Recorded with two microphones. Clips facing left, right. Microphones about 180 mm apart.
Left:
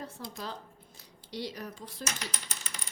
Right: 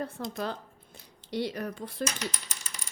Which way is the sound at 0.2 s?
55° right (ahead or behind).